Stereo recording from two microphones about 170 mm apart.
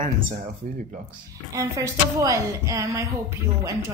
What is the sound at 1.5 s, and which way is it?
Speech, 20° right (ahead or behind).